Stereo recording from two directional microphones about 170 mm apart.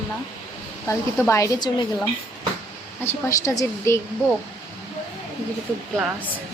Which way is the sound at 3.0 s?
15° left (ahead or behind).